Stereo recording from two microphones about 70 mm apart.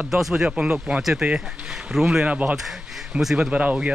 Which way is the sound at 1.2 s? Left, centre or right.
Right.